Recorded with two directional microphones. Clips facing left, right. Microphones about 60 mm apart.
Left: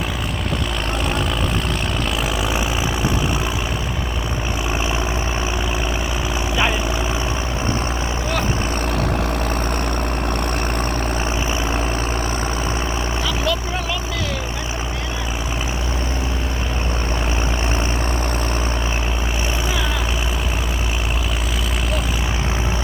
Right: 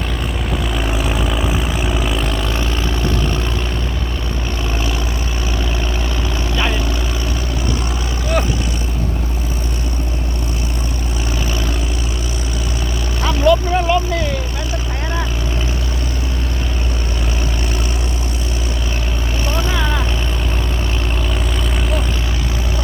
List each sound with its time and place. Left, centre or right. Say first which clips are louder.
13.4 s vehicle: right 9 dB; right